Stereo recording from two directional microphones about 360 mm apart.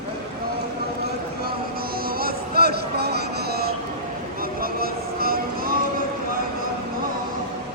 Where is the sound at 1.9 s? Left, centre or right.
Right.